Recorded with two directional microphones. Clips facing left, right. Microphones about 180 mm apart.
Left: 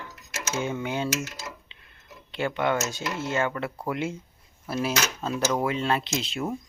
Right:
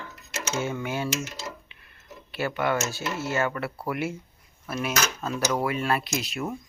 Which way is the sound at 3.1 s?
20° left (ahead or behind).